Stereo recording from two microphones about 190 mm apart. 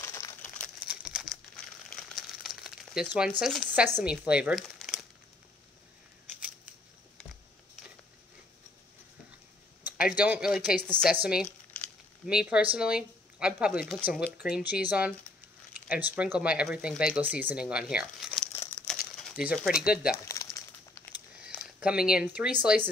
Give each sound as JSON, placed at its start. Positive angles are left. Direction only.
{"t": 0.0, "sound": "crumpling", "side_deg": 15}
{"t": 0.8, "sound": "crumpling", "side_deg": -5}
{"t": 2.4, "sound": "crumpling", "side_deg": 0}
{"t": 3.2, "sound": "speech", "side_deg": -5}
{"t": 9.8, "sound": "speech", "side_deg": -5}
{"t": 12.3, "sound": "speech", "side_deg": -5}
{"t": 18.5, "sound": "crumpling", "side_deg": 15}
{"t": 18.9, "sound": "speech", "side_deg": 0}
{"t": 20.2, "sound": "crumpling", "side_deg": 15}
{"t": 21.5, "sound": "a sound", "side_deg": -5}
{"t": 22.1, "sound": "speech", "side_deg": -5}